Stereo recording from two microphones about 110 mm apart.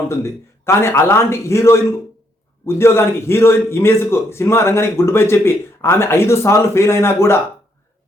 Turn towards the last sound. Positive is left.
turn(degrees=25)  # may be behind; listen again after turning